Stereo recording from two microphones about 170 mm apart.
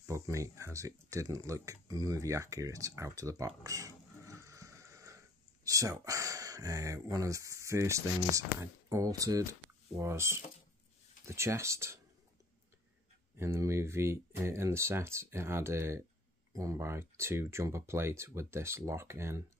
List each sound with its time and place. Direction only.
0.0 s speech: 20° right (ahead or behind)
13.4 s speech: 15° right (ahead or behind)